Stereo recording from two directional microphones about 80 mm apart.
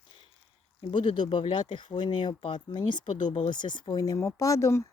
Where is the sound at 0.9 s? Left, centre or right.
Left.